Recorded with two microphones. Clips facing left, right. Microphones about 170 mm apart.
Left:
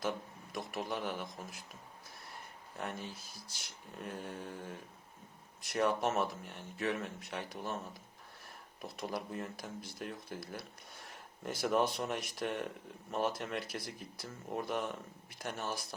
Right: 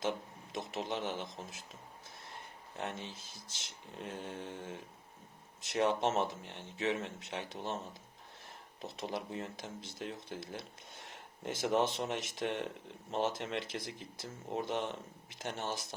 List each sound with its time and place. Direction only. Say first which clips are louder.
0.0 s speech: right 1 dB; 20° right (ahead or behind)
2.7 s speech: even; 25° right (ahead or behind)